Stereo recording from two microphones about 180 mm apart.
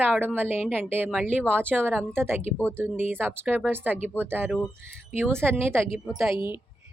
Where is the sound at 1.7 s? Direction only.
10° right (ahead or behind).